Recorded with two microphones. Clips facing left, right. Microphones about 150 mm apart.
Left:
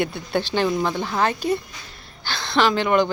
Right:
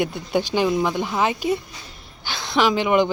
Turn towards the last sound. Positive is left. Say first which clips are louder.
# right 1 dB
turn(degrees=-15)  # may be behind; listen again after turning